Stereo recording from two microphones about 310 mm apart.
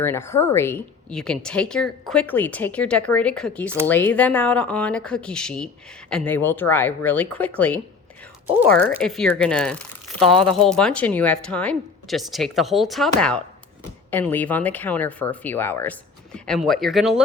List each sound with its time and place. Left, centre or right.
0.0 s speech: centre
8.8 s speech: centre